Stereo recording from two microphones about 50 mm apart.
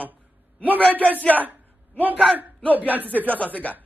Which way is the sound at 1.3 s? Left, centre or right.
Right.